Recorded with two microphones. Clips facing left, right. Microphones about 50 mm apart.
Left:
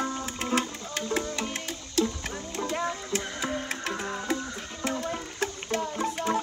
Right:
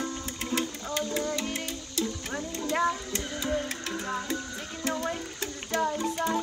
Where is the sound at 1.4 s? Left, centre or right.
Left.